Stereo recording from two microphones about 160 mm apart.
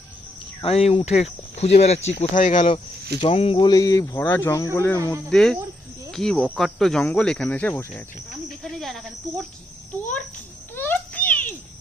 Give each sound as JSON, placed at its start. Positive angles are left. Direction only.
{"t": 0.6, "sound": "speech", "side_deg": 40}
{"t": 3.2, "sound": "speech", "side_deg": 40}
{"t": 5.3, "sound": "speech", "side_deg": 5}
{"t": 8.7, "sound": "speech", "side_deg": 0}
{"t": 10.8, "sound": "a sound", "side_deg": 10}